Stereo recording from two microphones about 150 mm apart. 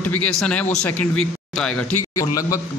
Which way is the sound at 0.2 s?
10° left (ahead or behind).